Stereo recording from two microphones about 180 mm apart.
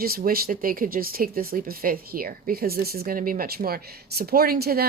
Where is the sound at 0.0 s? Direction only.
55° right (ahead or behind).